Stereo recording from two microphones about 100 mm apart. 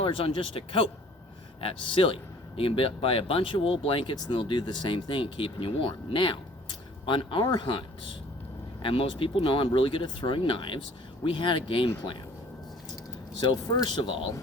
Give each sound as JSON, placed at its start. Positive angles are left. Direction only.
{"t": 0.0, "sound": "speech", "side_deg": 60}
{"t": 13.4, "sound": "speech", "side_deg": 45}